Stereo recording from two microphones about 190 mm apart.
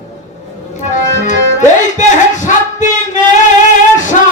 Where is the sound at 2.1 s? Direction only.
40° left (ahead or behind).